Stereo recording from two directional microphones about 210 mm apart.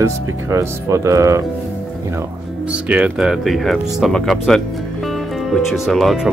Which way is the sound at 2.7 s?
5° right (ahead or behind).